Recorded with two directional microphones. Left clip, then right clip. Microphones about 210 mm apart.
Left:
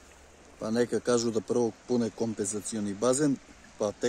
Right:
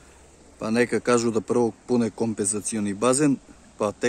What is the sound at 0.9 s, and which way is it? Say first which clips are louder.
Speech: right 5 dB; centre (ahead or behind).